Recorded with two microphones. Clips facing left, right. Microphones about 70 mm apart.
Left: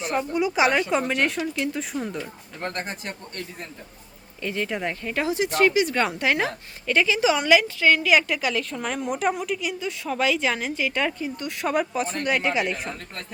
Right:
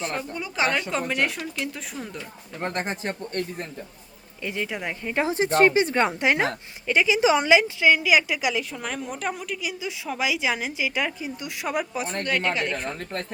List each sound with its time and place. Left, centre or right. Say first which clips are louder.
0.0 s speech: left 6 dB; centre
2.6 s a woman's voice: right 3 dB; right
4.4 s speech: left 2 dB; centre
5.0 s a woman's voice: right 3 dB; right
5.3 s a woman's voice: right 2 dB; right; by 8.6 s centre
8.7 s a woman's voice: left 4 dB; centre
12.2 s speech: left 1 dB; centre